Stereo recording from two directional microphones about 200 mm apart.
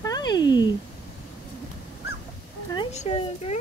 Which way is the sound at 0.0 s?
20° left (ahead or behind).